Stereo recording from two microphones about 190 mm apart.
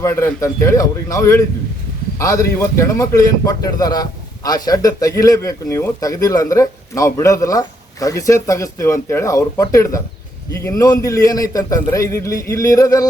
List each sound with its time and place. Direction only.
0.0 s a man's voice: 15° left (ahead or behind)